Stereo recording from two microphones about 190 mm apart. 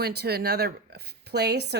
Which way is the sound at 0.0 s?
60° right (ahead or behind).